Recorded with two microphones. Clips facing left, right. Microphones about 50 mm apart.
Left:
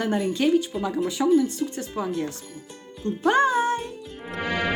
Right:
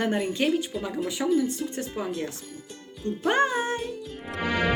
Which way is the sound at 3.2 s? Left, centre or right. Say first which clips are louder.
Left 4 dB; right.